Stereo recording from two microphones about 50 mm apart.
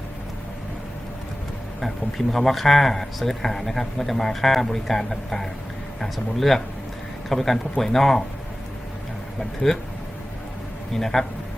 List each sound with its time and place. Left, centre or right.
1.8 s speech: centre
9.7 s speech: centre
10.9 s a man's voice: centre